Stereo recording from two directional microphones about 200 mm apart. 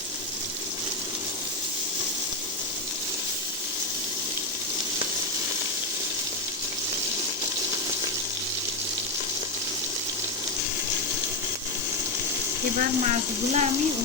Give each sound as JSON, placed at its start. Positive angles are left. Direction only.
{"t": 13.1, "sound": "speech", "side_deg": -35}